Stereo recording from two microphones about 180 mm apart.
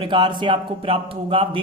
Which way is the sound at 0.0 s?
25° right (ahead or behind).